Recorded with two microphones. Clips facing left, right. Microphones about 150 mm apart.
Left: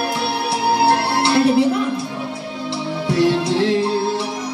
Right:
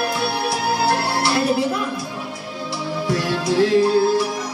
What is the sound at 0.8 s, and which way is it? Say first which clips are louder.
Music: left 3 dB; 25° left (ahead or behind).